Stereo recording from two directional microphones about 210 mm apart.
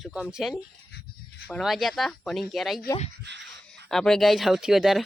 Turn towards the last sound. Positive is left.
turn(degrees=0)  # may be behind; listen again after turning